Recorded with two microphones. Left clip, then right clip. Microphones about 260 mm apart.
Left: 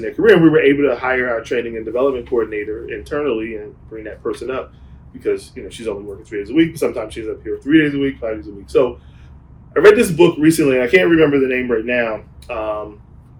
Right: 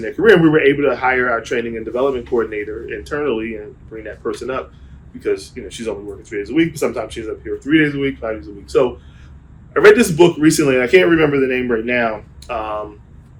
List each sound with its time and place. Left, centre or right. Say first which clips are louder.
0.0 s speech: even; centre